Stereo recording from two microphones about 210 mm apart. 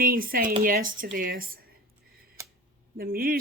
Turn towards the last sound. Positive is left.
turn(degrees=-45)  # may be behind; listen again after turning